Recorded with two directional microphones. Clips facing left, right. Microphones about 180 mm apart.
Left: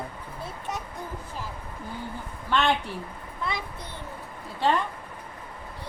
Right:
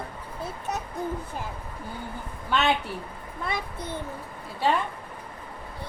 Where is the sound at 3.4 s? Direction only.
50° right (ahead or behind).